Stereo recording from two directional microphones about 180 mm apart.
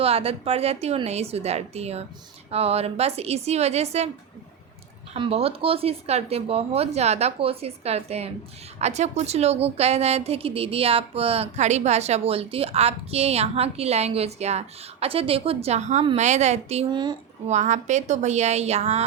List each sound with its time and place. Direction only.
0.0 s a woman's voice: 35° right (ahead or behind)
5.1 s a woman's voice: 30° right (ahead or behind)
17.5 s a woman's voice: 40° right (ahead or behind)